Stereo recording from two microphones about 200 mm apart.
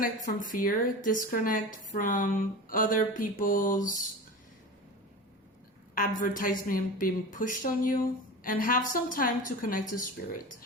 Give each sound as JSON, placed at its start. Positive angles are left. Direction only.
{"t": 0.3, "sound": "a woman's voice", "side_deg": 40}
{"t": 5.9, "sound": "a woman's voice", "side_deg": 45}